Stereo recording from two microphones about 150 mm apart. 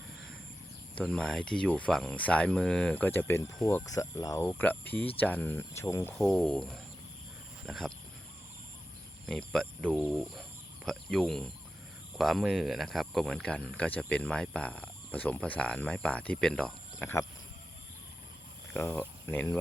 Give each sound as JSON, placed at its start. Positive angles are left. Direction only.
{"t": 0.9, "sound": "speech", "side_deg": 5}
{"t": 4.4, "sound": "speech", "side_deg": 10}
{"t": 6.1, "sound": "speech", "side_deg": 5}
{"t": 9.2, "sound": "speech", "side_deg": 5}
{"t": 18.7, "sound": "speech", "side_deg": 15}